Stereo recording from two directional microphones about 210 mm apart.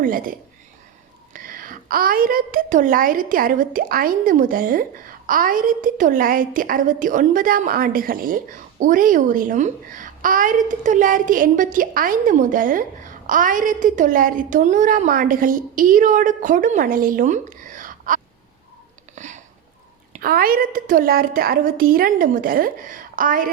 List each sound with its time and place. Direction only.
0.0 s a child's voice: 40° right (ahead or behind)
19.1 s a sound: 35° right (ahead or behind)
20.1 s a woman's voice: 45° right (ahead or behind)